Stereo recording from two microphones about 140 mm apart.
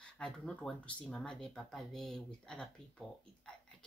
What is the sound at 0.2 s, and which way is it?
Speech, 5° left (ahead or behind).